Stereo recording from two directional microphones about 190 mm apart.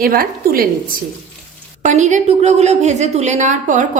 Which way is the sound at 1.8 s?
40° right (ahead or behind).